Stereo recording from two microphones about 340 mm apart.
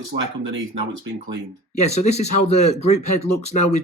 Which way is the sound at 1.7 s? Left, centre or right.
Centre.